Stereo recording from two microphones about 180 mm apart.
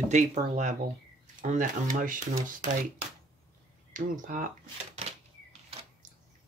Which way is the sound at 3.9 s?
50° right (ahead or behind).